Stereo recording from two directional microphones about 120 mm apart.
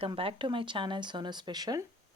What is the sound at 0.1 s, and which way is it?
Speech, 45° right (ahead or behind).